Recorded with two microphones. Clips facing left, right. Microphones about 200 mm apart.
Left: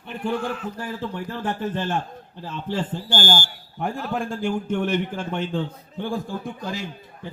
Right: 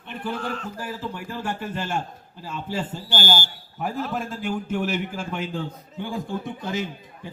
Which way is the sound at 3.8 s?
Centre (ahead or behind).